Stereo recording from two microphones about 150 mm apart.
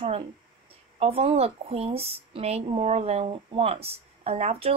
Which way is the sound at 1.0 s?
40° right (ahead or behind).